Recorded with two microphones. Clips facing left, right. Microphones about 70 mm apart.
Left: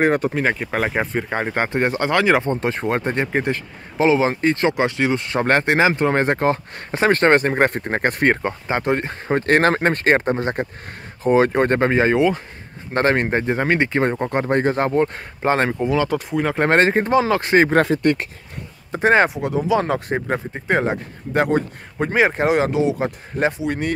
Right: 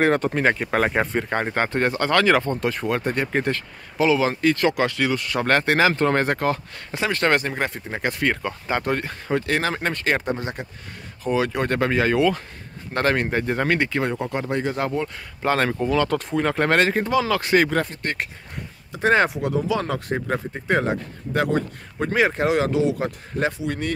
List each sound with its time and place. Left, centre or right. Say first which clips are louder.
0.0 s speech: left 1 dB; centre; by 3.3 s left
3.3 s speech: left 2 dB; centre; by 14.9 s left
15.4 s speech: left 2 dB; left; by 16.5 s centre
16.5 s speech: left 5 dB; left
18.9 s speech: left 3 dB; left
19.3 s speech: left 3 dB; centre
19.8 s speech: left 4 dB; left